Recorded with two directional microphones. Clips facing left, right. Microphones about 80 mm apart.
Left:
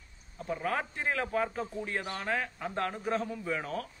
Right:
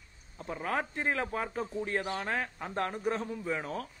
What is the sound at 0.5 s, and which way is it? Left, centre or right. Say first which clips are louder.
A man's voice: left 1 dB; right.